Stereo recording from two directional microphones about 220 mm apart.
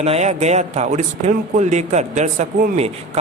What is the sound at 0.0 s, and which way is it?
A man's voice, 30° right (ahead or behind).